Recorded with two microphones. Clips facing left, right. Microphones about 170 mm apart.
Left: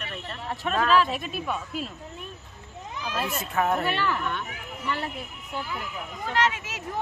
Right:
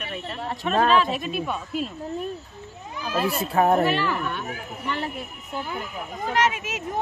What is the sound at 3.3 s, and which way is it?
Speech, 35° right (ahead or behind).